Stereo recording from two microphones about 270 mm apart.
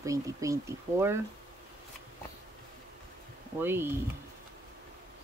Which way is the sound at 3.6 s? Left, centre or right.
Centre.